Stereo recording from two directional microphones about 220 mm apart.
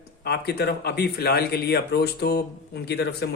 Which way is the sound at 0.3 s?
45° left (ahead or behind).